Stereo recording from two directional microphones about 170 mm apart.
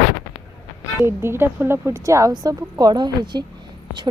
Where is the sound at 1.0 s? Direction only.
15° right (ahead or behind).